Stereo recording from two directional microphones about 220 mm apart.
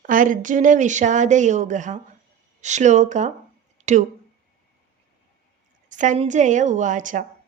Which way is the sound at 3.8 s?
35° right (ahead or behind).